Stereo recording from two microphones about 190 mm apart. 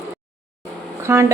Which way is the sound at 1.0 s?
15° right (ahead or behind).